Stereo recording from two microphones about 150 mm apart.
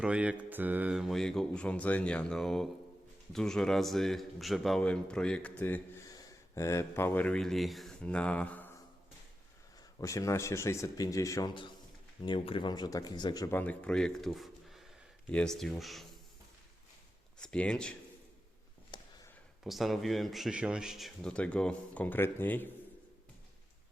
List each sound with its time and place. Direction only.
0.0 s a man's voice: 10° right (ahead or behind); by 8.7 s 10° left (ahead or behind)
10.0 s speech: 20° left (ahead or behind)
13.5 s speech: 10° left (ahead or behind)
17.3 s speech: 5° left (ahead or behind)
18.9 s a sound: 30° left (ahead or behind)
19.6 s speech: centre (ahead or behind)